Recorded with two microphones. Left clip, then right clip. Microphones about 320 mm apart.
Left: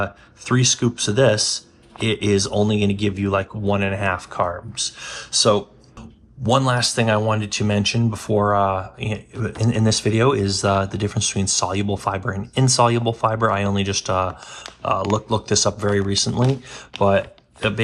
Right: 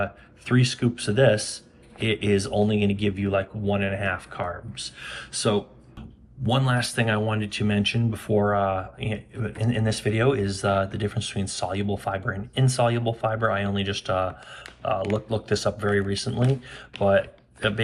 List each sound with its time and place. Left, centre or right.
0.0 s speech: centre